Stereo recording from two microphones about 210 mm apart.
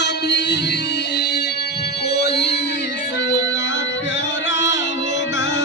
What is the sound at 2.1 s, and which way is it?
Music, 50° left (ahead or behind).